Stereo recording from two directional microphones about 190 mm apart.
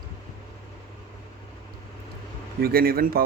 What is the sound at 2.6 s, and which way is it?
Speech, 55° right (ahead or behind).